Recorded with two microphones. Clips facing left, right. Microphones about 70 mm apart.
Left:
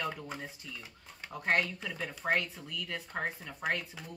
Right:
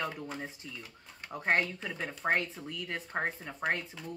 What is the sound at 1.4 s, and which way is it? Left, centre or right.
Speech, right.